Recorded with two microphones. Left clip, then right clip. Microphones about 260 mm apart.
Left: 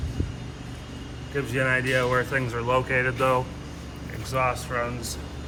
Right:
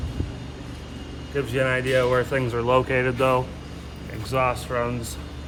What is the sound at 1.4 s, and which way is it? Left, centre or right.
Speech, right.